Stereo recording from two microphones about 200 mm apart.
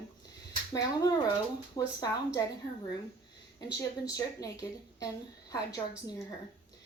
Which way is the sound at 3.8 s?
20° left (ahead or behind).